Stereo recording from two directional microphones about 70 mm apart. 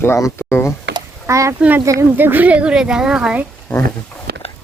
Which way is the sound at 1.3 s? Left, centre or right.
Right.